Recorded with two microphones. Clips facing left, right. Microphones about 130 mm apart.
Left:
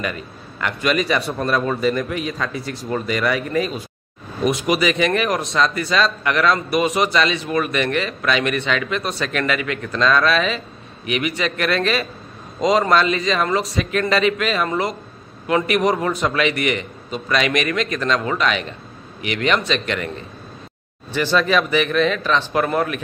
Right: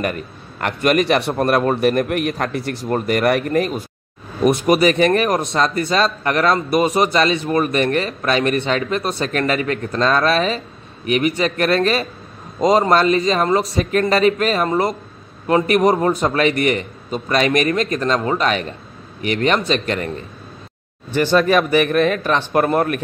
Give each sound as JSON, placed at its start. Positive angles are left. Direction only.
{"t": 0.0, "sound": "a man's voice", "side_deg": -55}
{"t": 4.5, "sound": "speech", "side_deg": -50}
{"t": 6.5, "sound": "a man's voice", "side_deg": -25}
{"t": 21.1, "sound": "speech", "side_deg": -50}